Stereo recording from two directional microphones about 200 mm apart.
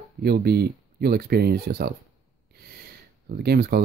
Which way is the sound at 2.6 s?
50° right (ahead or behind).